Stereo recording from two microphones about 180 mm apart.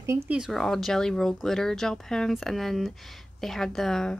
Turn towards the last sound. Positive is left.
turn(degrees=0)  # may be behind; listen again after turning